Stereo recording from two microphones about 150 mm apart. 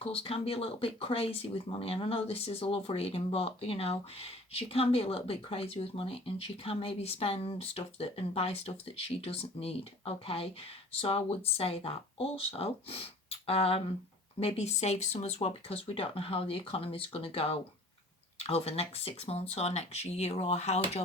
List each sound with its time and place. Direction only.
0.0 s speech: 40° left (ahead or behind)